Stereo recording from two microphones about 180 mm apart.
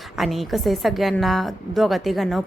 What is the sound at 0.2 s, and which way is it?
A woman's voice, centre (ahead or behind).